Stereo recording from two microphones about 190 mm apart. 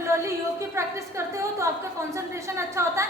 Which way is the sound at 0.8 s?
15° right (ahead or behind).